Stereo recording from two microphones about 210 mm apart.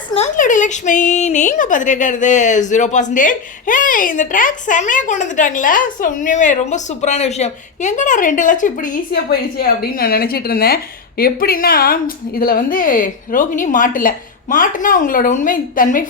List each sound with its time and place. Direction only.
0.1 s a woman's voice: 35° left (ahead or behind)